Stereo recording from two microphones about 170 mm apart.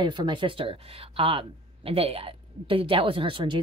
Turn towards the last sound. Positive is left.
turn(degrees=-30)  # may be behind; listen again after turning